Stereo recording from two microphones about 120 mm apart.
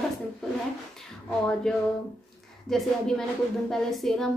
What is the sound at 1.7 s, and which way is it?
A woman's voice, 5° left (ahead or behind).